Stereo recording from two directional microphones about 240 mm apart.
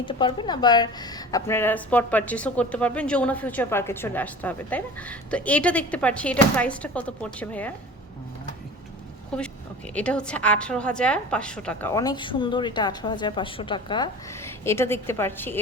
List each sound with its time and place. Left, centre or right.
0.0 s a woman's voice: centre
9.3 s a woman's voice: centre